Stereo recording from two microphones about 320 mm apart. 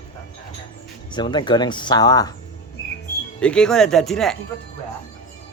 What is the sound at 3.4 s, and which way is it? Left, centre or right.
Speech, centre.